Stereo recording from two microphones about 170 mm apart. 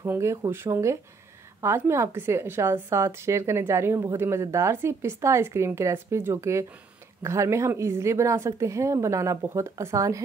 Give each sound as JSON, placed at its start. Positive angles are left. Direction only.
{"t": 0.0, "sound": "a woman's voice", "side_deg": -15}